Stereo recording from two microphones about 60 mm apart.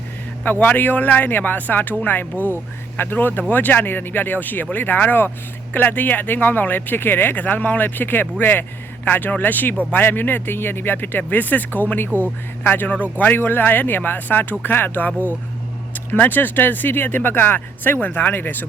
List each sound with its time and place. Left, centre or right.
0.6 s speech: left